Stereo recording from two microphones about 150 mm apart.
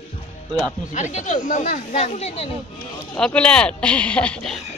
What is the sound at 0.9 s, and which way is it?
Speech, 55° left (ahead or behind).